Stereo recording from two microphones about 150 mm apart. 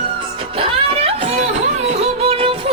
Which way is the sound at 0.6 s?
45° right (ahead or behind).